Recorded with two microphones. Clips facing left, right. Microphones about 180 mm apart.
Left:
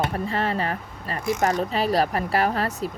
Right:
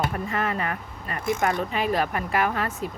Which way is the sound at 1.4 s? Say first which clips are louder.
Left 4 dB; 45° left (ahead or behind).